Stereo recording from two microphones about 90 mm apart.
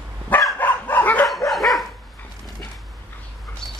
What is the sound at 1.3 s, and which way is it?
Dog, centre (ahead or behind).